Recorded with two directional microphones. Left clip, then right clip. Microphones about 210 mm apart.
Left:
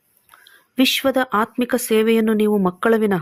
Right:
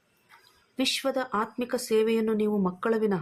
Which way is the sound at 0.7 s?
40° left (ahead or behind).